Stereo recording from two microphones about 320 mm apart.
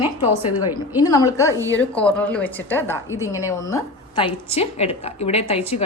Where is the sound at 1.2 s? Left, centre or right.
Centre.